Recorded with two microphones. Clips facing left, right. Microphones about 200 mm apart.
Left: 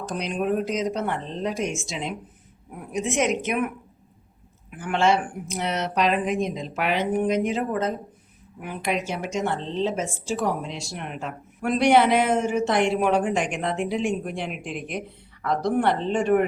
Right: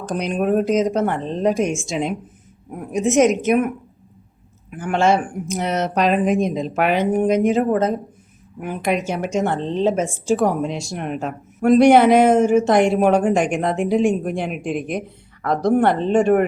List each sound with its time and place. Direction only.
0.0 s a woman's voice: 50° right (ahead or behind)
4.8 s a woman's voice: 45° right (ahead or behind)